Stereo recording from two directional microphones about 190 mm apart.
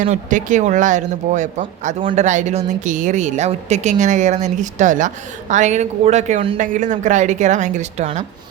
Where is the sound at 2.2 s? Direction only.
40° right (ahead or behind).